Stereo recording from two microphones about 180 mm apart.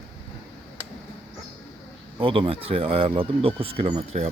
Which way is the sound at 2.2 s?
30° right (ahead or behind).